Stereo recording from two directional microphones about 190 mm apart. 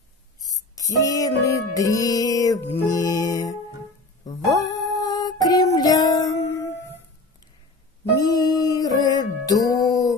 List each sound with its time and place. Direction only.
0.4 s music: 20° left (ahead or behind)
4.2 s female singing: 20° left (ahead or behind)
8.2 s music: 20° left (ahead or behind)